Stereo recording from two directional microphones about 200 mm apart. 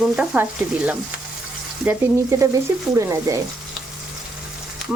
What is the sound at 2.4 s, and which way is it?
Speech, 15° right (ahead or behind).